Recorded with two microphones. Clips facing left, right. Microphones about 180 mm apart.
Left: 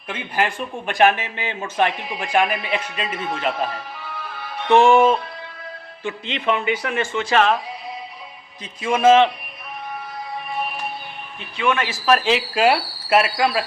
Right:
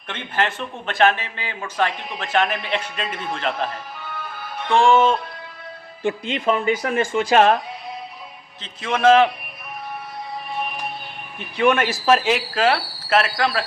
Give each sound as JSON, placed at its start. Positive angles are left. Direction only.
{"t": 0.1, "sound": "a man's voice", "side_deg": 10}
{"t": 2.0, "sound": "a man's voice", "side_deg": 0}
{"t": 2.2, "sound": "a man's voice", "side_deg": 10}
{"t": 4.7, "sound": "music", "side_deg": 20}
{"t": 6.0, "sound": "speech", "side_deg": -50}
{"t": 8.6, "sound": "a man's voice", "side_deg": 5}
{"t": 11.3, "sound": "speech", "side_deg": -50}
{"t": 12.5, "sound": "a man's voice", "side_deg": 10}